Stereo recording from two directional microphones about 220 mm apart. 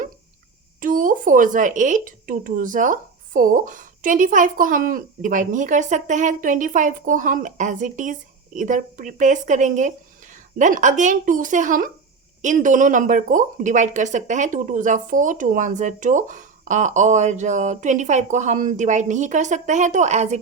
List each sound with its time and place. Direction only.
0.8 s speech: 35° right (ahead or behind)